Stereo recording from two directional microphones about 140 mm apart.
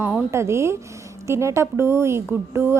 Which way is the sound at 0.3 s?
20° right (ahead or behind).